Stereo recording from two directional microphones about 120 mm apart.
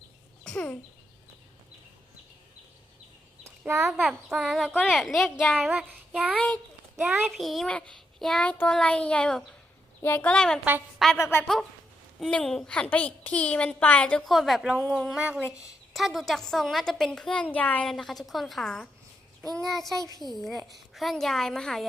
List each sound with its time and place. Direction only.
0.4 s a sound: 10° left (ahead or behind)
4.3 s a woman's voice: centre (ahead or behind)
5.5 s child singing: centre (ahead or behind)
6.3 s a child's voice: 10° left (ahead or behind)
7.0 s speech: 10° right (ahead or behind)
7.3 s a child's voice: centre (ahead or behind)
10.0 s a child's voice: 20° left (ahead or behind)
10.2 s a woman's voice: 5° left (ahead or behind)
11.2 s a child's voice: 20° left (ahead or behind)
12.2 s a child's voice: 5° left (ahead or behind); by 15.5 s 10° right (ahead or behind)
15.9 s a woman's voice: centre (ahead or behind)
20.0 s a child's voice: 30° right (ahead or behind)
20.2 s a woman's voice: centre (ahead or behind)